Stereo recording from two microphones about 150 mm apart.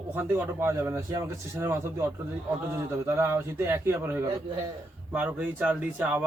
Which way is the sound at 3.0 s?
15° right (ahead or behind).